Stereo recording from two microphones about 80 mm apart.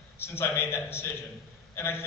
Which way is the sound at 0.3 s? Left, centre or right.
Left.